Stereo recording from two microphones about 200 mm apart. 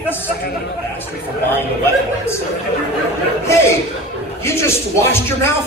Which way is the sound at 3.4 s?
15° left (ahead or behind).